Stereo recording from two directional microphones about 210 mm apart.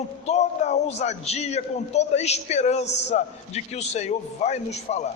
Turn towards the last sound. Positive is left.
turn(degrees=30)  # may be behind; listen again after turning